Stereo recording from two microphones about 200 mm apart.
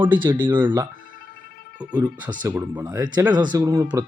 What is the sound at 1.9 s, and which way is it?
Speech, 20° right (ahead or behind).